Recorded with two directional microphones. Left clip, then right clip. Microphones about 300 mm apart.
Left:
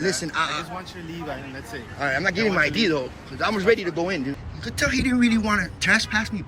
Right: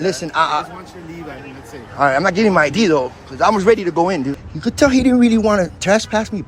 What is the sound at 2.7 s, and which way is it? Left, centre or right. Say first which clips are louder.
Speech: right 8 dB; centre.